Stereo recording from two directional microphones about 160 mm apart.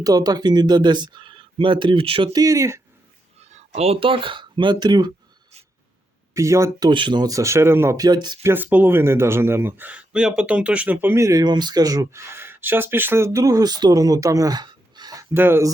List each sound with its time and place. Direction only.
0.0 s speech: 25° right (ahead or behind)
3.8 s speech: 35° right (ahead or behind)
6.3 s speech: 20° right (ahead or behind)
8.4 s speech: 10° right (ahead or behind)